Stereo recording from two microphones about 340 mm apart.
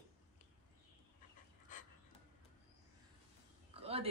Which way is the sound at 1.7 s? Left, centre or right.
Left.